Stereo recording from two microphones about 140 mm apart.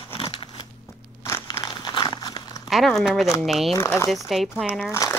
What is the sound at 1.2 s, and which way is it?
Crushing, 20° left (ahead or behind).